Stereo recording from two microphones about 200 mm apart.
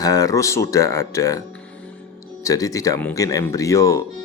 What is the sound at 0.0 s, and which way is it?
Speech, 15° left (ahead or behind).